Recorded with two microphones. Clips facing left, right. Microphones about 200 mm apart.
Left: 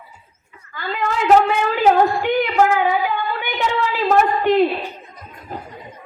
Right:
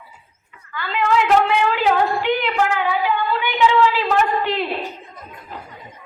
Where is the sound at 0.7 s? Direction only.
45° left (ahead or behind).